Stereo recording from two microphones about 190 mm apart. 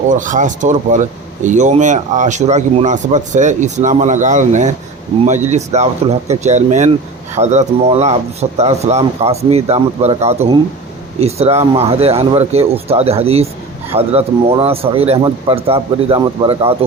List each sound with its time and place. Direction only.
0.1 s speech: 40° right (ahead or behind)